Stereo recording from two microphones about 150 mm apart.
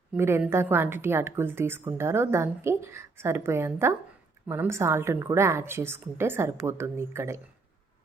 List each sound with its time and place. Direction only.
0.1 s a woman's voice: 15° right (ahead or behind)